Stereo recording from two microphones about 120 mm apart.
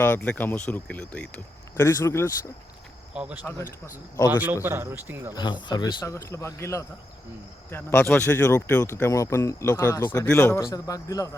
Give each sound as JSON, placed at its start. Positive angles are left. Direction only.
{"t": 0.0, "sound": "speech", "side_deg": 15}
{"t": 1.7, "sound": "speech", "side_deg": 25}
{"t": 3.1, "sound": "a man's voice", "side_deg": -10}
{"t": 5.3, "sound": "speech", "side_deg": 40}
{"t": 6.1, "sound": "speech", "side_deg": 25}